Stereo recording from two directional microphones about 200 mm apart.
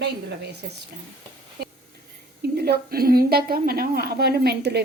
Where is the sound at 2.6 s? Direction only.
50° right (ahead or behind).